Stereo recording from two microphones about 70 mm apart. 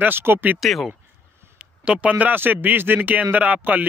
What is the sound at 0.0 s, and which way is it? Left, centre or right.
Speech, right.